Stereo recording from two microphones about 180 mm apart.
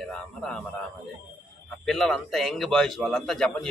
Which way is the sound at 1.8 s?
Centre (ahead or behind).